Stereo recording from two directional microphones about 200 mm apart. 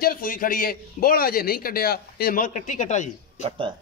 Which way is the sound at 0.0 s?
45° left (ahead or behind).